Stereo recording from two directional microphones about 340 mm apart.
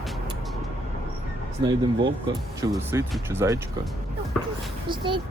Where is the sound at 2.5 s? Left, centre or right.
Centre.